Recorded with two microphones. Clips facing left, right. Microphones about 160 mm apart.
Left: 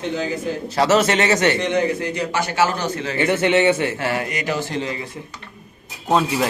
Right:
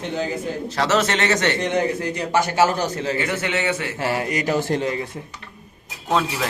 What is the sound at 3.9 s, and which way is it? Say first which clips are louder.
Speech: right 1 dB; 30° right (ahead or behind).